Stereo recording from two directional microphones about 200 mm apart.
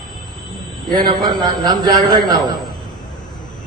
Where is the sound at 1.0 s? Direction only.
20° right (ahead or behind).